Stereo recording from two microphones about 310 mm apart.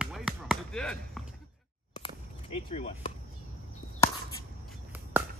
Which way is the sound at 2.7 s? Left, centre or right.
Centre.